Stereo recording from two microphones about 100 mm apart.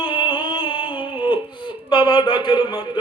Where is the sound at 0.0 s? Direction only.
55° left (ahead or behind).